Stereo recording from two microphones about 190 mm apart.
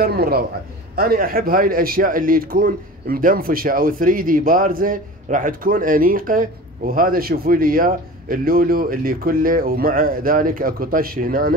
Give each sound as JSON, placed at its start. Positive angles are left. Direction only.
{"t": 0.0, "sound": "speech", "side_deg": -55}